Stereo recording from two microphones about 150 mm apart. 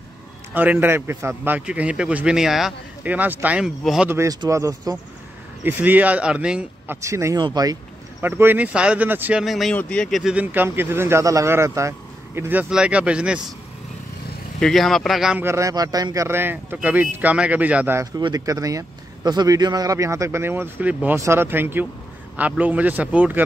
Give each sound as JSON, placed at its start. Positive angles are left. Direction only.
{"t": 0.6, "sound": "a man's voice", "side_deg": -10}
{"t": 4.1, "sound": "a man's voice", "side_deg": -20}
{"t": 7.0, "sound": "speech", "side_deg": -20}
{"t": 8.2, "sound": "a man's voice", "side_deg": -15}
{"t": 9.4, "sound": "a man's voice", "side_deg": 0}
{"t": 14.6, "sound": "speech", "side_deg": 0}
{"t": 15.4, "sound": "a man's voice", "side_deg": -20}
{"t": 18.1, "sound": "a man's voice", "side_deg": -25}